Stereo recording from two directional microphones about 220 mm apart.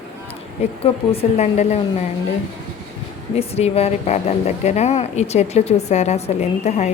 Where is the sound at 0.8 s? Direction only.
25° left (ahead or behind).